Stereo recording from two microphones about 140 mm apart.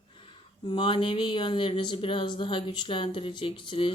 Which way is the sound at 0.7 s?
35° left (ahead or behind).